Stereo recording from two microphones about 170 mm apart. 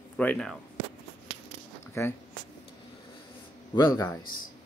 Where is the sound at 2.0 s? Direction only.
15° left (ahead or behind).